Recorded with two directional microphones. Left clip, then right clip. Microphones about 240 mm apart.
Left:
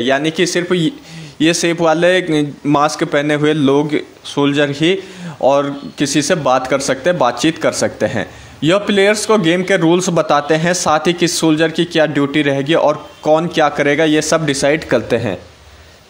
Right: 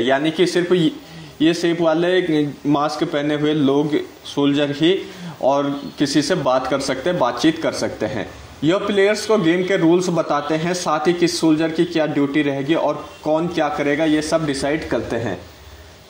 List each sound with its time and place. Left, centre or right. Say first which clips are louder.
0.0 s a man's voice: left 2 dB; left